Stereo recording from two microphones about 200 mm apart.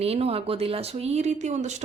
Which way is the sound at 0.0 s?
30° right (ahead or behind).